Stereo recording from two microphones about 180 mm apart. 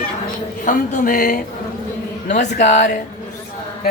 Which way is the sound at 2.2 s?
40° left (ahead or behind).